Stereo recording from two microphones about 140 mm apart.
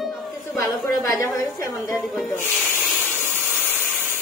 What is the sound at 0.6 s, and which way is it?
A woman's voice, 25° left (ahead or behind).